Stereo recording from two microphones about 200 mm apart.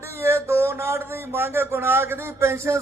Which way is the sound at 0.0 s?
15° right (ahead or behind).